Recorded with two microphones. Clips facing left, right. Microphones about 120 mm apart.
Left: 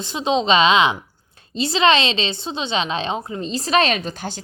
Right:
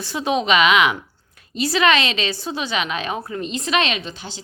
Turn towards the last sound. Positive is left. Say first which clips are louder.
# left 4 dB
turn(degrees=50)  # may be behind; listen again after turning